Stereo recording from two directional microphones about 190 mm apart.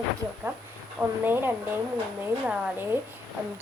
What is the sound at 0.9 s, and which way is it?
A woman's voice, 10° right (ahead or behind).